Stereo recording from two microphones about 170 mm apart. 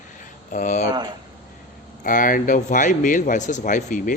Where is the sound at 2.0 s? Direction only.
50° left (ahead or behind).